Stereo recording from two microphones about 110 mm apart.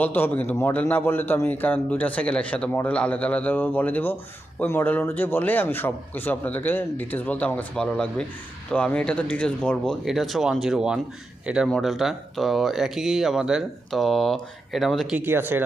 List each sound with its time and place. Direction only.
0.0 s a man's voice: 15° left (ahead or behind); by 15.2 s centre (ahead or behind)
15.2 s speech: 20° right (ahead or behind)